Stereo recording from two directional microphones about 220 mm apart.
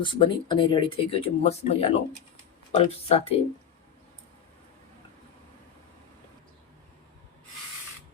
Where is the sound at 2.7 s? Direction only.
25° left (ahead or behind).